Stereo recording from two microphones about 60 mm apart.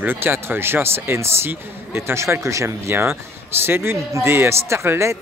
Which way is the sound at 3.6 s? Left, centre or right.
Right.